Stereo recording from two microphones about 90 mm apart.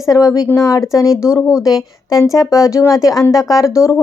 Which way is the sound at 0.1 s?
40° left (ahead or behind).